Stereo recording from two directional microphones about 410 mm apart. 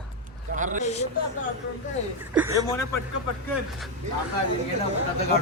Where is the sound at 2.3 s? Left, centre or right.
Centre.